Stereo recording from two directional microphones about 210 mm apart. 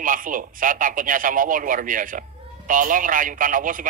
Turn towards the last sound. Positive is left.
turn(degrees=-40)  # may be behind; listen again after turning